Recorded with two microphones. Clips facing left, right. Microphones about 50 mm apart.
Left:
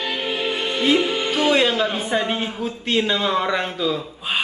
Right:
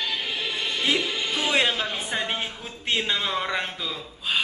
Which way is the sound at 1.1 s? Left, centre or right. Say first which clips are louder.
Left 7 dB; left.